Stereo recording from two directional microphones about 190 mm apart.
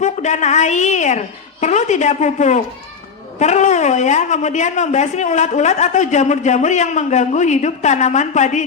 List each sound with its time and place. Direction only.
0.0 s a woman's voice: 40° left (ahead or behind)